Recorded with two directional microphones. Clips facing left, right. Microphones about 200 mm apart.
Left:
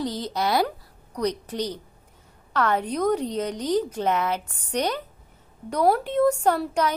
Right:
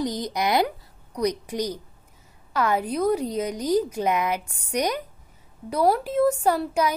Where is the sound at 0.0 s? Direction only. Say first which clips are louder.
Right 1 dB; 15° right (ahead or behind).